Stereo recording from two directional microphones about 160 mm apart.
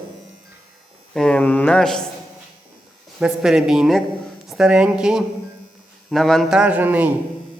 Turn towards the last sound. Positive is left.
turn(degrees=-10)  # may be behind; listen again after turning